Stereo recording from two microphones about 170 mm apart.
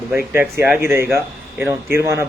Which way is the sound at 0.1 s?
15° right (ahead or behind).